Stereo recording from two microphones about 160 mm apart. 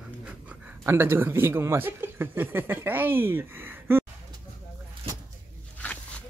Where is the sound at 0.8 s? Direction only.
15° right (ahead or behind).